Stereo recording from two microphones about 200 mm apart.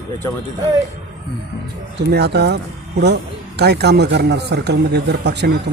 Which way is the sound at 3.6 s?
55° right (ahead or behind).